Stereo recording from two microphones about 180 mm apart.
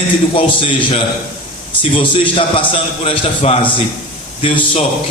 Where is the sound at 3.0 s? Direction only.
35° left (ahead or behind).